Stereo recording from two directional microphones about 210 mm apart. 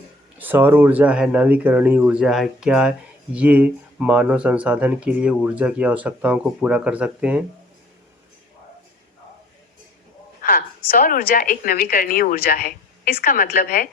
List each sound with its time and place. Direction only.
0.3 s speech: 10° right (ahead or behind)
10.4 s a woman's voice: 45° left (ahead or behind)